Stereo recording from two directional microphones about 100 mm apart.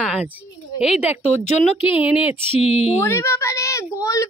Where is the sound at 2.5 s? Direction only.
85° left.